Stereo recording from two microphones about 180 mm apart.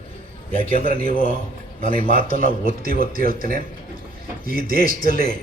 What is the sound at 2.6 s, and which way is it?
A man's voice, 55° right (ahead or behind).